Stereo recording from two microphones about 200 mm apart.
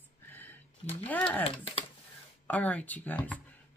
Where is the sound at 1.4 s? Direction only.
30° left (ahead or behind).